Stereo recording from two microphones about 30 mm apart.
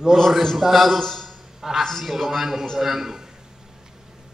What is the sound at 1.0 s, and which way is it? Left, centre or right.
Speech, centre.